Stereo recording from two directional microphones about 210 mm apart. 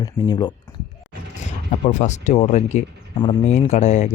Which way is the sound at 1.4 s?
35° left (ahead or behind).